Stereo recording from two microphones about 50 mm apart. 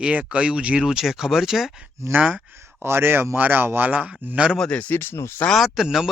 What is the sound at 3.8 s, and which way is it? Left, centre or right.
Speech, right.